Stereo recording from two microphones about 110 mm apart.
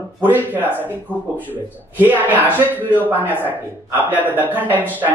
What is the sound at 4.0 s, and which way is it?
A man's voice, 15° right (ahead or behind).